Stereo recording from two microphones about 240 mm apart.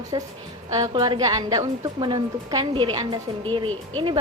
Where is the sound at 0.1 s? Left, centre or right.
Centre.